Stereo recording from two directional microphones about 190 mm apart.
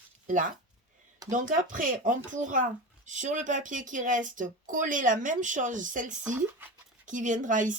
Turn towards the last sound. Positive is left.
turn(degrees=-40)  # may be behind; listen again after turning